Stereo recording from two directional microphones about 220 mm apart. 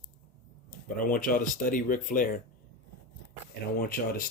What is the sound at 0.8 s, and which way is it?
Speech, 40° left (ahead or behind).